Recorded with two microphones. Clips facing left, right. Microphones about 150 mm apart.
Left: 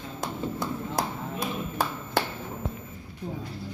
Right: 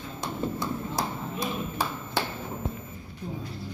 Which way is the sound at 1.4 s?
50° left (ahead or behind).